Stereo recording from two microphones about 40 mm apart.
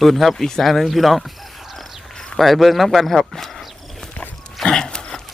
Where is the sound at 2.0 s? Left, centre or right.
Centre.